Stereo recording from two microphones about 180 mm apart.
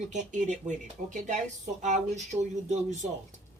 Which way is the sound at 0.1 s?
40° right (ahead or behind).